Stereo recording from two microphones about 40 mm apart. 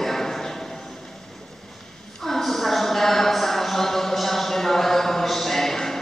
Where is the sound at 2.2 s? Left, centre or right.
Centre.